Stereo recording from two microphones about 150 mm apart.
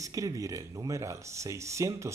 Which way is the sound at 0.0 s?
20° right (ahead or behind).